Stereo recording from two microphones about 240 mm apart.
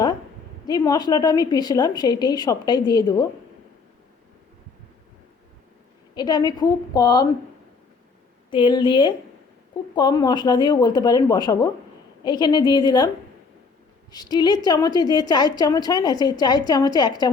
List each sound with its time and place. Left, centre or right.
0.7 s a woman's voice: centre
6.1 s a woman's voice: centre
8.4 s a woman's voice: centre
14.1 s a woman's voice: centre